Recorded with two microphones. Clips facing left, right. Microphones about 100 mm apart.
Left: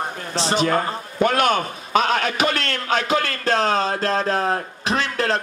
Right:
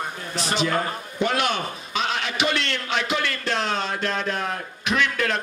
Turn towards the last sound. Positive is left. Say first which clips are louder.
# left 2 dB
turn(degrees=35)  # may be behind; listen again after turning